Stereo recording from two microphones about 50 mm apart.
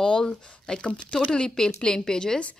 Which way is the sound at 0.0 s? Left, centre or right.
Centre.